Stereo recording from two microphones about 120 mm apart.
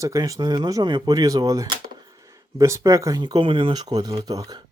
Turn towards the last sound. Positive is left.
turn(degrees=-30)  # may be behind; listen again after turning